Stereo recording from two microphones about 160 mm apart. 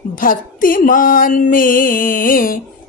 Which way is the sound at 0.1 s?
60° left (ahead or behind).